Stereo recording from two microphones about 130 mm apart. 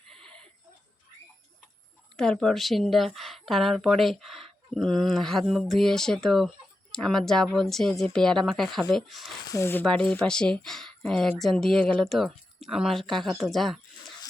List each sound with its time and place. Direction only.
0.1 s a sound: 5° left (ahead or behind)
2.1 s a woman's voice: 5° left (ahead or behind)
9.5 s speech: 20° left (ahead or behind)
9.8 s a woman's voice: 10° left (ahead or behind)